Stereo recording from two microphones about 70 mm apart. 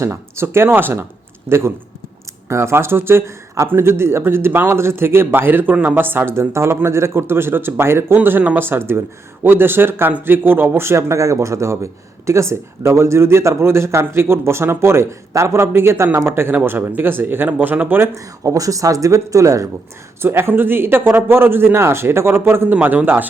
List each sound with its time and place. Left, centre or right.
0.0 s speech: right
18.1 s speech: right
20.2 s speech: right
22.7 s a man's voice: right